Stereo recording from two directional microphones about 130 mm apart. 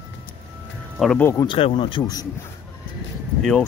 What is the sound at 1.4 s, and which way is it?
Speech, 40° left (ahead or behind).